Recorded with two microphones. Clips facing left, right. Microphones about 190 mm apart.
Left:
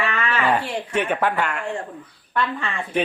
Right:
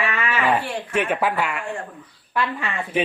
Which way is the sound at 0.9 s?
5° right (ahead or behind).